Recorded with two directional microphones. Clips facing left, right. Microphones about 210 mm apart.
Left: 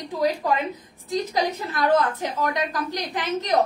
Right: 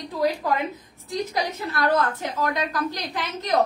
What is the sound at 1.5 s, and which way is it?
A woman's voice, 15° left (ahead or behind).